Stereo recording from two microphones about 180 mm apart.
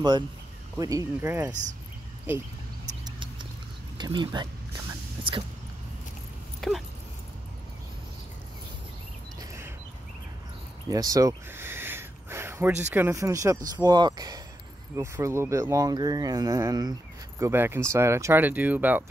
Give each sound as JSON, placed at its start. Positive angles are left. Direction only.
{"t": 0.7, "sound": "speech", "side_deg": -20}
{"t": 1.5, "sound": "speech", "side_deg": -45}
{"t": 4.0, "sound": "speech", "side_deg": -25}
{"t": 6.6, "sound": "dog", "side_deg": 0}
{"t": 9.4, "sound": "a sound", "side_deg": -15}
{"t": 10.9, "sound": "a sound", "side_deg": -20}
{"t": 12.9, "sound": "speech", "side_deg": -15}